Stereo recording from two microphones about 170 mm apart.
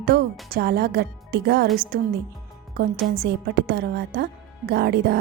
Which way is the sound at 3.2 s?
70° right (ahead or behind).